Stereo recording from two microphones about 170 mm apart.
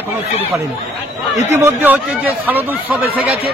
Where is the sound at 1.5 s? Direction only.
15° right (ahead or behind).